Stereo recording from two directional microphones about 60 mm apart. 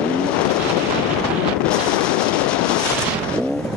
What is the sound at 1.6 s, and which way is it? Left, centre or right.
Wind noise, centre.